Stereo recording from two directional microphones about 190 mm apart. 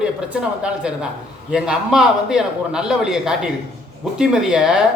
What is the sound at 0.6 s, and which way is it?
A man's voice, 5° right (ahead or behind).